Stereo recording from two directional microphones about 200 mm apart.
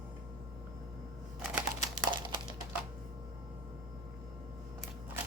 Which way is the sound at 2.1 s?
25° right (ahead or behind).